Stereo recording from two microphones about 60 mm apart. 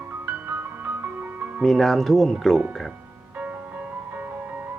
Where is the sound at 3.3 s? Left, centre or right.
Right.